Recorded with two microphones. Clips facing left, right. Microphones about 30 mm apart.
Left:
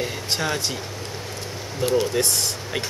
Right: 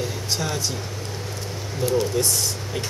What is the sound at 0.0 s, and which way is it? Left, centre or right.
Speech, left.